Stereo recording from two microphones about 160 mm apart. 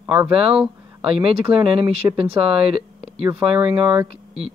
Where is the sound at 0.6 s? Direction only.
5° right (ahead or behind).